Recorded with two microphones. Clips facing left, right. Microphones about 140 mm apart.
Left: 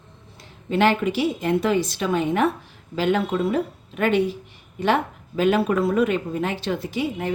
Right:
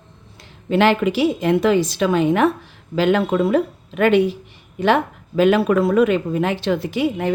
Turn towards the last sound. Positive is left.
turn(degrees=-75)  # may be behind; listen again after turning